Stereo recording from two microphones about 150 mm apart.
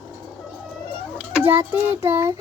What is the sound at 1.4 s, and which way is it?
Speech, 15° right (ahead or behind).